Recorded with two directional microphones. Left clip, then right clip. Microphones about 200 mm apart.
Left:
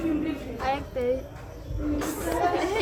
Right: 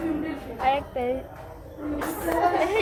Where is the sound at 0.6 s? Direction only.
20° left (ahead or behind).